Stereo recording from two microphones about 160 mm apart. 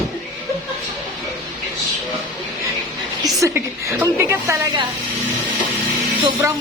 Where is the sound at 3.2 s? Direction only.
20° right (ahead or behind).